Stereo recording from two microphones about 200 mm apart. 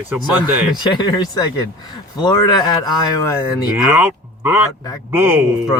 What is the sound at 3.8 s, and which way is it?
Speech, 5° right (ahead or behind).